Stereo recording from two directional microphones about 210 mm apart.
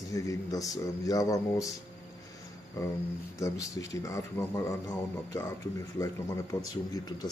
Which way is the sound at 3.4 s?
15° left (ahead or behind).